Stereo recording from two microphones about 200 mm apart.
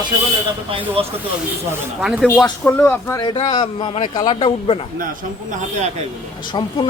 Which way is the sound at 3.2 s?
25° left (ahead or behind).